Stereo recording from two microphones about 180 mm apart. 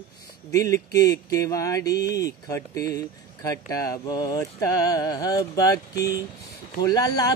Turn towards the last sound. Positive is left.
turn(degrees=20)  # may be behind; listen again after turning